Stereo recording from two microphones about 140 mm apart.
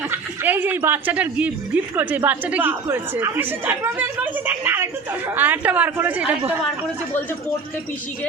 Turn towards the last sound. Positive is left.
turn(degrees=-10)  # may be behind; listen again after turning